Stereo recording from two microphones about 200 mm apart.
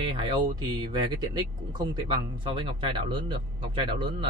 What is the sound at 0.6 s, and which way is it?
Speech, 20° right (ahead or behind).